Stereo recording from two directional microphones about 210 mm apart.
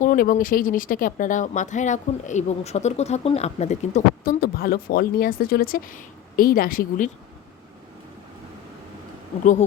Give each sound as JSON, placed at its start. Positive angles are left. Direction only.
{"t": 0.0, "sound": "speech", "side_deg": 40}